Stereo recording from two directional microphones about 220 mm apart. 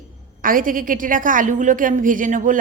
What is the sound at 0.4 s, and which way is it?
A woman's voice, 40° right (ahead or behind).